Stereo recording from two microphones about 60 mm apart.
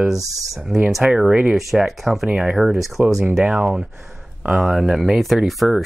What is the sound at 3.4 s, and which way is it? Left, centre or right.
Speech, centre.